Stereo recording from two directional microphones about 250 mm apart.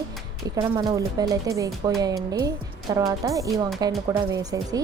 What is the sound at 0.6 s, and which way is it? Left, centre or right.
A woman's voice, centre.